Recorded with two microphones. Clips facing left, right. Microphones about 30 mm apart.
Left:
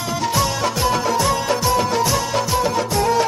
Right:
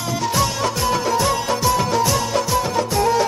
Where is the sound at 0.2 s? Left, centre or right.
Centre.